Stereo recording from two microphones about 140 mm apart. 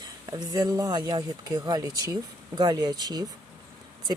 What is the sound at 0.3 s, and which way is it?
Speech, 25° right (ahead or behind).